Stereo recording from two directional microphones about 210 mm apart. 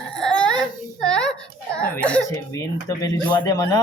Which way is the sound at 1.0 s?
5° left (ahead or behind).